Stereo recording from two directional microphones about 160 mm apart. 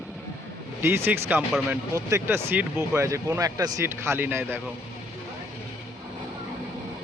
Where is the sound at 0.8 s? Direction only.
15° right (ahead or behind).